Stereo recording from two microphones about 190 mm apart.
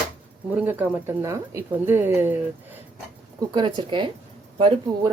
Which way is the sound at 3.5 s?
25° right (ahead or behind).